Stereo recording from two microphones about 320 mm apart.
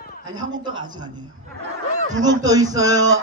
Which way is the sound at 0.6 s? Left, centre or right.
Centre.